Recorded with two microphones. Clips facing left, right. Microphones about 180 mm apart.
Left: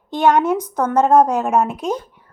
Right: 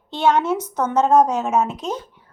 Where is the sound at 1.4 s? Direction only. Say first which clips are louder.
Left 2 dB; 60° left (ahead or behind).